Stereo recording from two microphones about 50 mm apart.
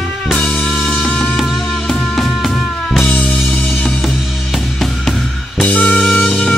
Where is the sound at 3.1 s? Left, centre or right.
Left.